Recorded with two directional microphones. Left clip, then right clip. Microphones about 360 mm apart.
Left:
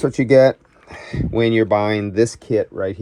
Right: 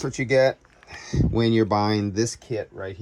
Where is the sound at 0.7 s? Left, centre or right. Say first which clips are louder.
Left 1 dB; centre.